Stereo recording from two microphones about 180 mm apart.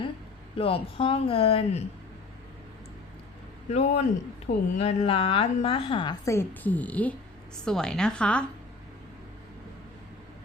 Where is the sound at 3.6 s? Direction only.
35° left (ahead or behind); by 8.4 s 5° left (ahead or behind).